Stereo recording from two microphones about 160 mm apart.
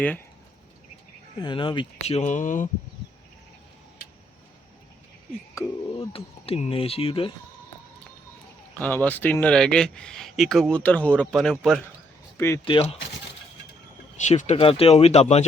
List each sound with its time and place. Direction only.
1.4 s speech: 30° left (ahead or behind); by 2.6 s 55° left (ahead or behind)
5.6 s speech: 20° left (ahead or behind)
6.0 s speech: 35° left (ahead or behind)
9.0 s speech: 10° left (ahead or behind)
12.6 s speech: 35° left (ahead or behind)
14.2 s speech: 50° left (ahead or behind)